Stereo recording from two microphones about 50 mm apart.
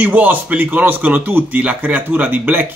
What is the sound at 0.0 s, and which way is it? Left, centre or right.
Speech, right.